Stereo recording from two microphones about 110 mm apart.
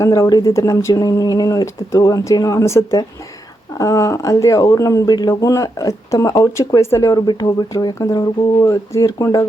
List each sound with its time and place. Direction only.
0.0 s speech: 30° left (ahead or behind)